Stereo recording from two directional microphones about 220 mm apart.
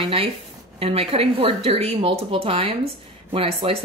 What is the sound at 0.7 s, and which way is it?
Speech, 25° right (ahead or behind).